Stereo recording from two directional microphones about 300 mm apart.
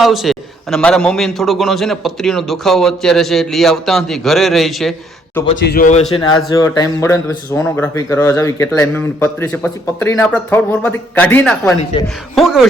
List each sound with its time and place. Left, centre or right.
0.0 s a man's voice: centre
5.6 s speech: left
6.1 s a man's voice: centre